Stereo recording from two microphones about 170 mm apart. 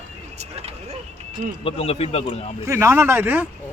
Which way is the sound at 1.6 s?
35° left (ahead or behind).